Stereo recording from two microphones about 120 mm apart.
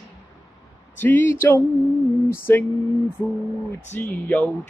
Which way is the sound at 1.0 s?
15° left (ahead or behind).